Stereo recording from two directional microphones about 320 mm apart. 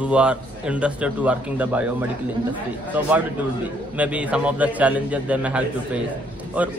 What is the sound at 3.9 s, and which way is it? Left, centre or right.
A man's voice, centre.